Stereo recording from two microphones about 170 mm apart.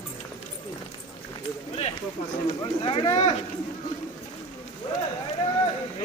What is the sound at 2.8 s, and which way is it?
Speech, 30° left (ahead or behind).